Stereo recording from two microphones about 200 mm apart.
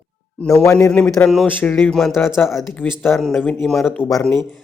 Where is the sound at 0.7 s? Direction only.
5° left (ahead or behind).